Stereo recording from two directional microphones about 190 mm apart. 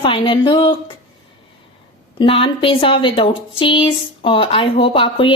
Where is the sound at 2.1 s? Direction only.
25° left (ahead or behind).